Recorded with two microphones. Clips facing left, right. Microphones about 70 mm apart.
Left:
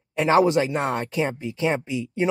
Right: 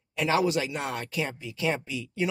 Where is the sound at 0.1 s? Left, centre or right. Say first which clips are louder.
Left 7 dB; left.